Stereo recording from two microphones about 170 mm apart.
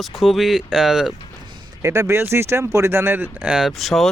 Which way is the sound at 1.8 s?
15° right (ahead or behind).